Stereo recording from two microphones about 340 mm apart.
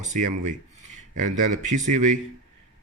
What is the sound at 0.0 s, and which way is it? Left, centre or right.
Speech, right.